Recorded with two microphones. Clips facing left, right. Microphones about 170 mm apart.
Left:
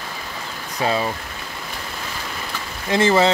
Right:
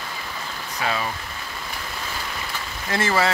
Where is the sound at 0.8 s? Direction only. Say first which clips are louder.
Left 5 dB; 30° left (ahead or behind).